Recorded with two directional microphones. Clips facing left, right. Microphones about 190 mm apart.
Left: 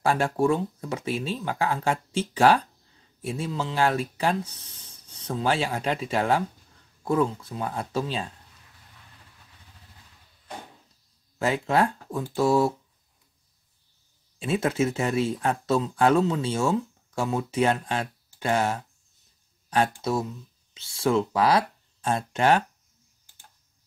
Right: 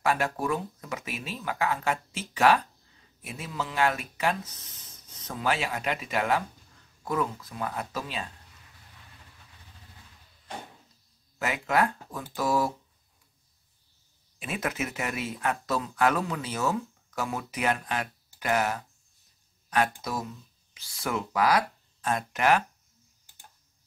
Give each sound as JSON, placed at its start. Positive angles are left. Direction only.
{"t": 0.0, "sound": "speech", "side_deg": 30}
{"t": 11.3, "sound": "speech", "side_deg": 30}
{"t": 14.4, "sound": "speech", "side_deg": 30}
{"t": 20.0, "sound": "speech", "side_deg": 25}